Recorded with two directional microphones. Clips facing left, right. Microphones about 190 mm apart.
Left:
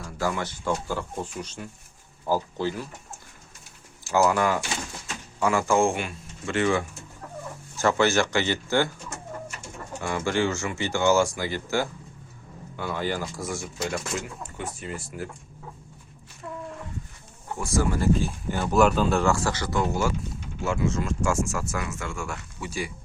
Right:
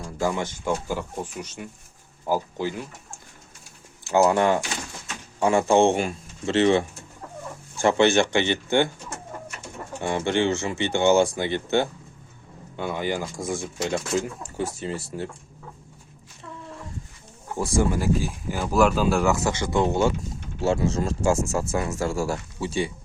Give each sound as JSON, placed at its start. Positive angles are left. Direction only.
{"t": 0.2, "sound": "speech", "side_deg": -20}
{"t": 4.1, "sound": "speech", "side_deg": -25}
{"t": 5.9, "sound": "speech", "side_deg": -35}
{"t": 10.0, "sound": "speech", "side_deg": -25}
{"t": 10.8, "sound": "speech", "side_deg": -20}
{"t": 13.6, "sound": "speech", "side_deg": -30}
{"t": 17.7, "sound": "speech", "side_deg": -10}
{"t": 19.2, "sound": "speech", "side_deg": -20}